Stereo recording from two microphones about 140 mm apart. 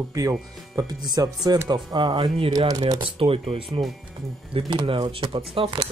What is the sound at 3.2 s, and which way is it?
Speech, 40° right (ahead or behind).